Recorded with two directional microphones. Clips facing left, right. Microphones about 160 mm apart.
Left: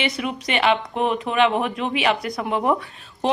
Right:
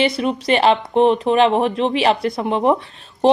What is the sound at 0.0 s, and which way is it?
Speech, 30° right (ahead or behind).